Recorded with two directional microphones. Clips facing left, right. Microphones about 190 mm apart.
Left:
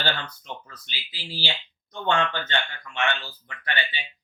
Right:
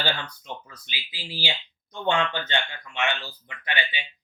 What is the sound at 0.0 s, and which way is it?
Speech, 10° right (ahead or behind).